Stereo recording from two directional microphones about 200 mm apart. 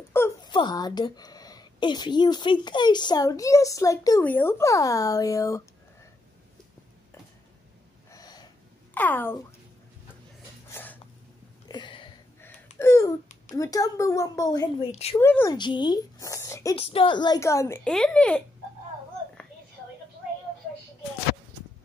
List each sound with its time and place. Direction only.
0.1 s speech: 15° left (ahead or behind)
8.1 s snort: 20° left (ahead or behind)
8.9 s speech: 10° left (ahead or behind)
10.7 s a sound: 10° left (ahead or behind)
11.6 s a sound: 20° left (ahead or behind)
12.4 s a child's voice: 10° left (ahead or behind)
14.9 s a woman's voice: 30° left (ahead or behind)
15.1 s speech: 10° left (ahead or behind)
16.7 s speech: 30° left (ahead or behind); by 18.4 s 5° left (ahead or behind)